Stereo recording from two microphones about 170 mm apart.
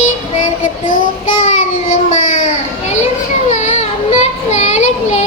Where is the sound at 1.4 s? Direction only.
45° left (ahead or behind).